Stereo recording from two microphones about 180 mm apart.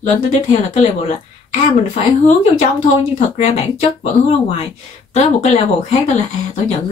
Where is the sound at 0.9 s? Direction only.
40° left (ahead or behind).